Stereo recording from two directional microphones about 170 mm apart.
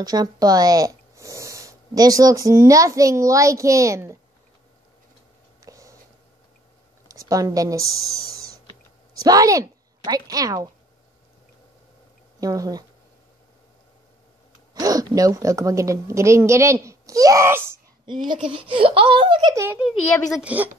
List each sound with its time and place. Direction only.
0.0 s speech: 20° right (ahead or behind)
5.6 s a sound: 20° right (ahead or behind)
7.1 s speech: 20° right (ahead or behind)
9.2 s a woman's voice: 20° right (ahead or behind)
12.4 s a woman's voice: 20° right (ahead or behind)
14.7 s a woman's voice: 20° right (ahead or behind)
18.0 s a woman's voice: 25° right (ahead or behind)
20.2 s a woman's voice: 5° right (ahead or behind)